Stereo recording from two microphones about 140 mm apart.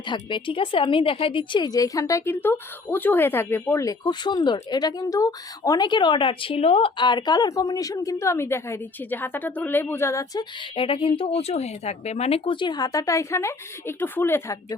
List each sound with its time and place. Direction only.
0.0 s a woman's voice: 35° left (ahead or behind)
10.6 s speech: 40° left (ahead or behind); by 14.8 s 20° left (ahead or behind)